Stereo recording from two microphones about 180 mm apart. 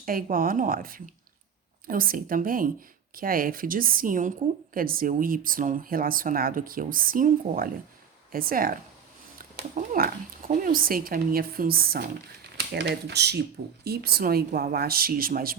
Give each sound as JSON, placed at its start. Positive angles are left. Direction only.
{"t": 0.0, "sound": "a woman's voice", "side_deg": -50}
{"t": 12.5, "sound": "speech", "side_deg": -70}